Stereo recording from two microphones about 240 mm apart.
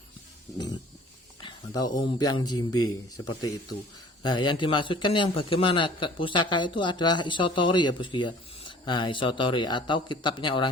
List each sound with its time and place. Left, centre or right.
1.4 s a man's voice: centre